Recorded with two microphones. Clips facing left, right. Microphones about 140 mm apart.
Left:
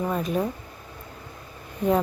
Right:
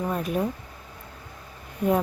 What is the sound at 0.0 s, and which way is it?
Speech, 5° right (ahead or behind).